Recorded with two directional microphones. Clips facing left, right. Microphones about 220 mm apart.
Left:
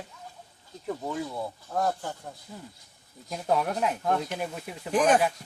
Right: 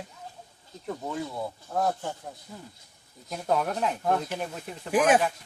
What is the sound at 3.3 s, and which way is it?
Speech, centre (ahead or behind).